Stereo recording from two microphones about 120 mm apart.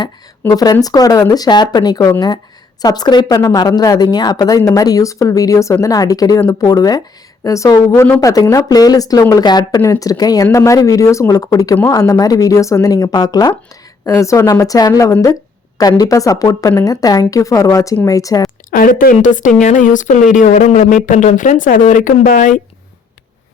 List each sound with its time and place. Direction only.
0.5 s a woman's voice: 30° left (ahead or behind)
8.2 s a woman's voice: 30° left (ahead or behind)
19.2 s speech: 90° left